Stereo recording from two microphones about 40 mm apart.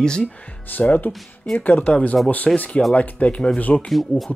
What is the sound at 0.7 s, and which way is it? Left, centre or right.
Speech, left.